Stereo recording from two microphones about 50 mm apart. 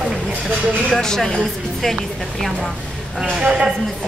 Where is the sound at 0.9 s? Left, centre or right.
Centre.